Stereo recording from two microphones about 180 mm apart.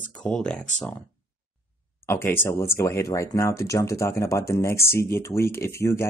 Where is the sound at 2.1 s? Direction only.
10° left (ahead or behind).